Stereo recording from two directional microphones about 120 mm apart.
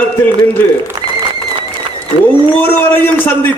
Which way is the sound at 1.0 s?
45° right (ahead or behind).